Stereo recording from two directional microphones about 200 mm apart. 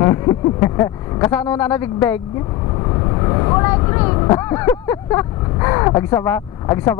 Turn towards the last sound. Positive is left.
turn(degrees=15)  # may be behind; listen again after turning